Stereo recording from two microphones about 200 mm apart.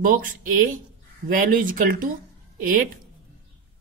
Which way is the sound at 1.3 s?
45° right (ahead or behind).